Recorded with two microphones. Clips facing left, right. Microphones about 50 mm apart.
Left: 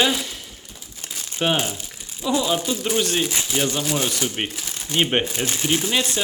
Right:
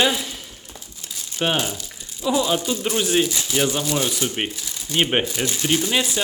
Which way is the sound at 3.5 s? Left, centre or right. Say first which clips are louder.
Right 2 dB; centre.